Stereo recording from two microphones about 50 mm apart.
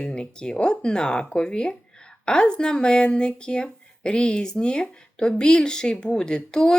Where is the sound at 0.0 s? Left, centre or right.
Centre.